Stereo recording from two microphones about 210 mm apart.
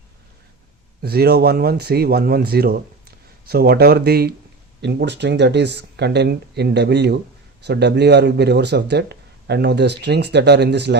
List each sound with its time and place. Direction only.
1.0 s speech: 50° right (ahead or behind)